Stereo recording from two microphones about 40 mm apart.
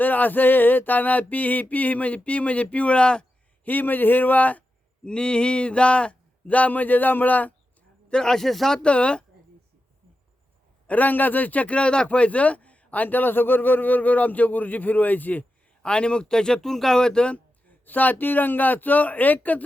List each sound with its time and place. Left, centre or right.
0.0 s a sound: left
3.6 s a man's voice: left
5.0 s a sound: left
8.1 s speech: centre
8.8 s speech: left
10.8 s a sound: left
12.0 s a man's voice: left
15.8 s speech: left
17.3 s a man's voice: left